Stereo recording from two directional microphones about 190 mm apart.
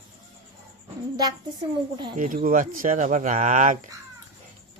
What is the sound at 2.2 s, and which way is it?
Speech, 45° right (ahead or behind).